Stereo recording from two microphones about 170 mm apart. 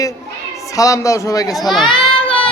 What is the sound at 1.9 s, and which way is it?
Child singing, 30° left (ahead or behind).